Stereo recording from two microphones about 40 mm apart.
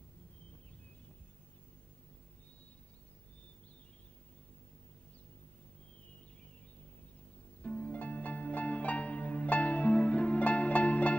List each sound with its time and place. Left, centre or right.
7.6 s music: left